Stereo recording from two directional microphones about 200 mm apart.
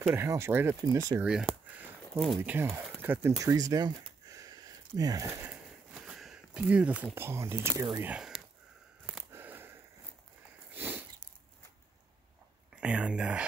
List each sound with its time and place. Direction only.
0.1 s speech: 10° right (ahead or behind)
1.3 s speech: centre (ahead or behind)
9.0 s a sound: 5° right (ahead or behind)
10.7 s sniff: 10° right (ahead or behind)
12.8 s speech: 5° right (ahead or behind)